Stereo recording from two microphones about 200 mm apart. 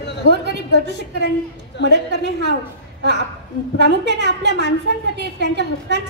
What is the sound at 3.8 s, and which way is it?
A woman's voice, 60° right (ahead or behind).